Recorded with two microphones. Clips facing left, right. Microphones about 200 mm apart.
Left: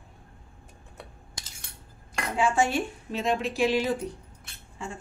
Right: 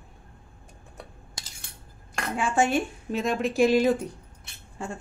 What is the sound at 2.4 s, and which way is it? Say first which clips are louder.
A woman's voice: right 1 dB; 50° right (ahead or behind).